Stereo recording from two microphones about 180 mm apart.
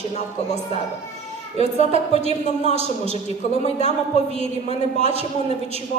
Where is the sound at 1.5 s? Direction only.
35° left (ahead or behind).